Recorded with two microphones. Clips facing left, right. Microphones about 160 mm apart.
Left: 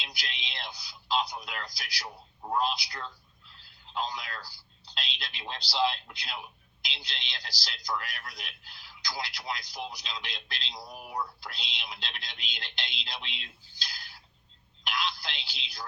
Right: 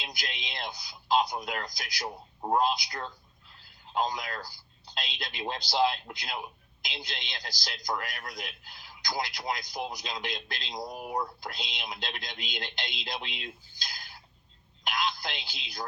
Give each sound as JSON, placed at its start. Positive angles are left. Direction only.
{"t": 0.0, "sound": "a man's voice", "side_deg": -45}